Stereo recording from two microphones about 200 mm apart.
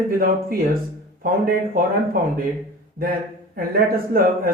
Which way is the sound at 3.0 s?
45° right (ahead or behind).